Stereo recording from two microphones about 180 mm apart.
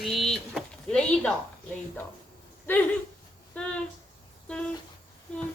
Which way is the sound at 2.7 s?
10° left (ahead or behind).